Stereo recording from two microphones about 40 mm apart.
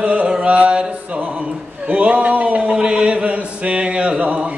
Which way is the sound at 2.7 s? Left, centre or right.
Right.